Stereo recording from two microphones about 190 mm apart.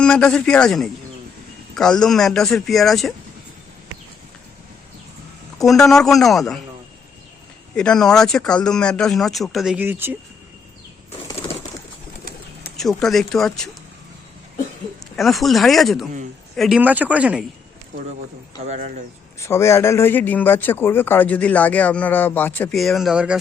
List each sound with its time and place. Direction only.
0.0 s speech: 5° left (ahead or behind)
5.6 s speech: centre (ahead or behind)
7.8 s speech: 5° left (ahead or behind)
12.7 s speech: centre (ahead or behind)
15.1 s speech: centre (ahead or behind)
18.6 s speech: 35° right (ahead or behind)
19.4 s a man's voice: 15° left (ahead or behind); by 23.4 s 5° right (ahead or behind)